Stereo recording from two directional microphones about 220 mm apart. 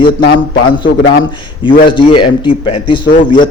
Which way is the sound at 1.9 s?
20° left (ahead or behind).